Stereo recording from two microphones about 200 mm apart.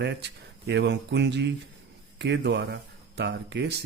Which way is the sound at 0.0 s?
60° right (ahead or behind).